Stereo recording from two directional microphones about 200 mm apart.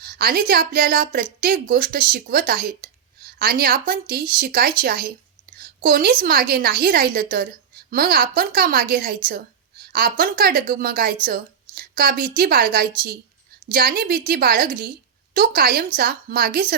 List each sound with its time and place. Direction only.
0.0 s a woman's voice: 50° right (ahead or behind)